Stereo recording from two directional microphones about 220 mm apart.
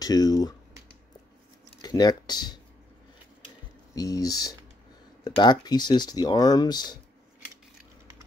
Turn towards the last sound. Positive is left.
turn(degrees=20)  # may be behind; listen again after turning